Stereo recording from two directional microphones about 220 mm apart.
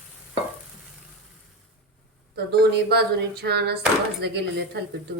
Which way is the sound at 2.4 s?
45° right (ahead or behind).